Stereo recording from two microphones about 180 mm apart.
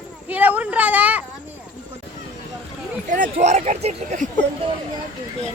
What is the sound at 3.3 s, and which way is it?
Speech, 40° right (ahead or behind).